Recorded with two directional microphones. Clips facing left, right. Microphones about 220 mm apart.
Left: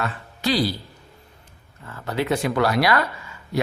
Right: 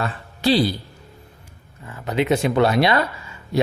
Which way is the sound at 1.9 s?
20° right (ahead or behind).